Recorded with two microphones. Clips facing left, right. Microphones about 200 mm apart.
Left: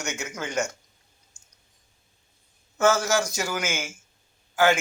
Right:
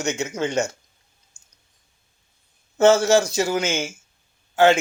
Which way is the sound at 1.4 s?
10° right (ahead or behind).